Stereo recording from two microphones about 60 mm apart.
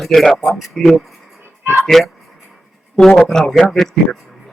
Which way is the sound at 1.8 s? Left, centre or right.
Centre.